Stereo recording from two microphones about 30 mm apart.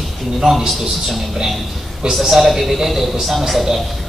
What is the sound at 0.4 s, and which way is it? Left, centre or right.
Speech, centre.